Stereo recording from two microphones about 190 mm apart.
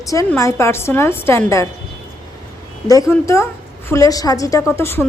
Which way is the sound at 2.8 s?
15° left (ahead or behind).